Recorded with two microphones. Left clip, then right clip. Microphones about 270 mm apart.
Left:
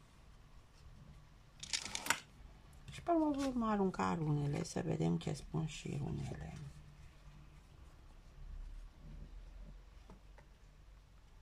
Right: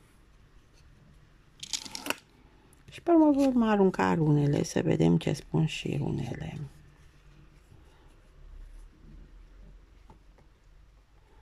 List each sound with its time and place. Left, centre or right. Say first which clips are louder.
2.9 s speech: right 12 dB; right